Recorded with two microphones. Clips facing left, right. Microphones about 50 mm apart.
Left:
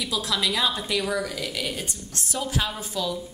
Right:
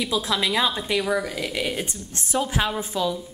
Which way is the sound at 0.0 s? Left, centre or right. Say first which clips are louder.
Right 3 dB; right.